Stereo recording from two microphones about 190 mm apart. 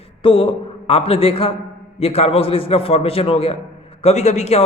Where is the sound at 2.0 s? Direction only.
30° left (ahead or behind).